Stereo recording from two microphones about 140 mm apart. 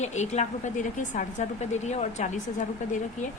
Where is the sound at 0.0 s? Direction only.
55° left (ahead or behind).